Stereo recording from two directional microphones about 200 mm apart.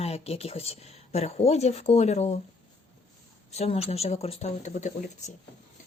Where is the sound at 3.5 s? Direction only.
30° left (ahead or behind).